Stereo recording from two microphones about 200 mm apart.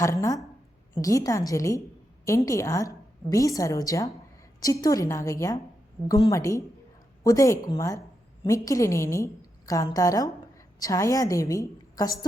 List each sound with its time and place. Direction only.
0.0 s a woman's voice: 15° left (ahead or behind)